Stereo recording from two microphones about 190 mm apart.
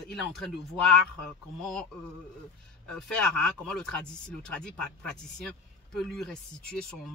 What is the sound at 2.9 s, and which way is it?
Speech, 5° left (ahead or behind).